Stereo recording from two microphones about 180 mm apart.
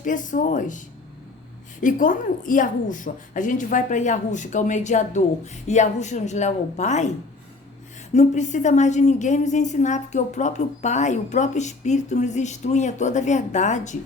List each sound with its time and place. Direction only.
0.0 s a woman's voice: 45° left (ahead or behind)
1.8 s a woman's voice: 50° left (ahead or behind)
8.1 s a woman's voice: 40° left (ahead or behind)